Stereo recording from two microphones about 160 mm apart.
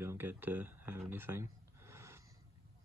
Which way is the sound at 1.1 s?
15° right (ahead or behind).